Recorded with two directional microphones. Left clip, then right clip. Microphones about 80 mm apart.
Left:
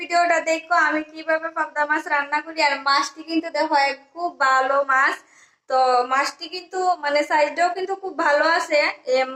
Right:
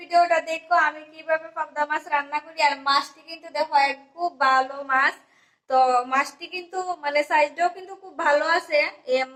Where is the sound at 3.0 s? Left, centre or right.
Left.